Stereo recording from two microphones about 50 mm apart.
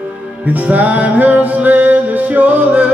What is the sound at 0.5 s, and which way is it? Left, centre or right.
Music, right.